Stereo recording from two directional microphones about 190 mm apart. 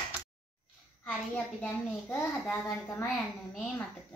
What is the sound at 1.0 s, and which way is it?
A child's voice, 10° left (ahead or behind).